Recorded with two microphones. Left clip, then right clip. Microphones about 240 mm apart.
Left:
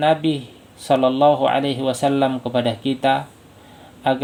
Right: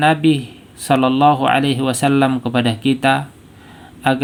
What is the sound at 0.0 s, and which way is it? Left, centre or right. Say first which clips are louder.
Speech: right 3 dB; right.